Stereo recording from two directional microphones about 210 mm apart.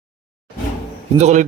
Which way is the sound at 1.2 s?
35° right (ahead or behind).